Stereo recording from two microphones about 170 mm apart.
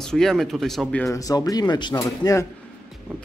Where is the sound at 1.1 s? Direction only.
20° left (ahead or behind).